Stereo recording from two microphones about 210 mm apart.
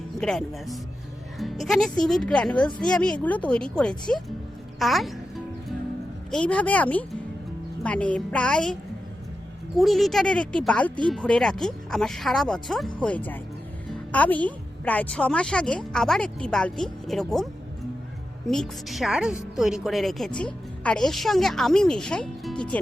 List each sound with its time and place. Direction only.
0.2 s a woman's voice: 5° left (ahead or behind)
6.3 s a woman's voice: 5° left (ahead or behind)
9.7 s a woman's voice: centre (ahead or behind)
18.4 s a woman's voice: centre (ahead or behind)